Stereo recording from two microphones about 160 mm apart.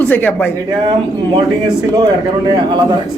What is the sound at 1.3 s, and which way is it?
Speech, 25° right (ahead or behind).